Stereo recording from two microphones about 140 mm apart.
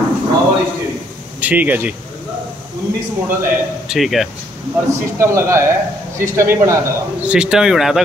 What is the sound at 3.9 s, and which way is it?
Speech, centre (ahead or behind).